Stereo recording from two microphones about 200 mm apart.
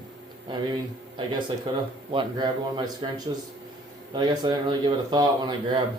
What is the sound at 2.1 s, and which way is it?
Speech, 20° right (ahead or behind).